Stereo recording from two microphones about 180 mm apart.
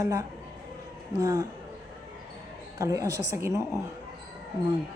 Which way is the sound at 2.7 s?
20° right (ahead or behind).